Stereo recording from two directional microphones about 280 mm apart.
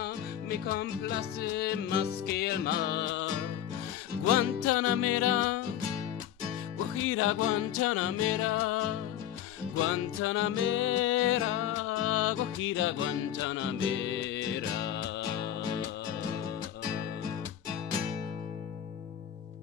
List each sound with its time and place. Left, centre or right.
0.0 s music: left
4.3 s music: left
7.0 s music: left